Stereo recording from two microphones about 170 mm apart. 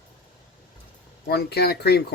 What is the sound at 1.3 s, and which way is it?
Speech, 70° left (ahead or behind).